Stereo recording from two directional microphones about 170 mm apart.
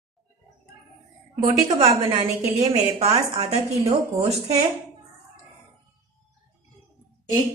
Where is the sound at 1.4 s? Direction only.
40° right (ahead or behind).